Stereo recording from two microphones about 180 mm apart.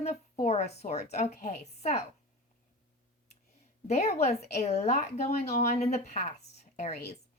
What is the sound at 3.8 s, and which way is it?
A woman's voice, 40° left (ahead or behind).